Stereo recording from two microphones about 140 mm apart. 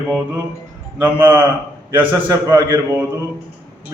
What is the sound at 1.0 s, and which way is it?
A man's voice, 15° right (ahead or behind).